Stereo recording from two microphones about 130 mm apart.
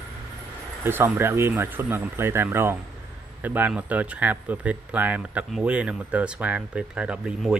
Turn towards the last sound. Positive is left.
turn(degrees=-5)  # may be behind; listen again after turning